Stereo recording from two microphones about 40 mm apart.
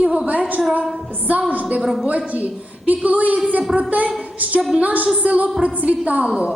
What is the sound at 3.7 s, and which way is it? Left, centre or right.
Speech, centre.